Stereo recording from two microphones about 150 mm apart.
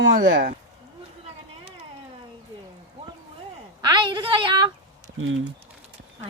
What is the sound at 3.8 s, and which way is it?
Speech, 30° right (ahead or behind).